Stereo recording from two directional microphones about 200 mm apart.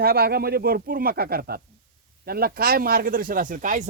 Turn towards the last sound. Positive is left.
turn(degrees=-40)  # may be behind; listen again after turning